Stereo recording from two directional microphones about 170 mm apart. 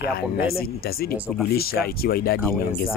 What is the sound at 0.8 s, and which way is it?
Speech, 65° left (ahead or behind).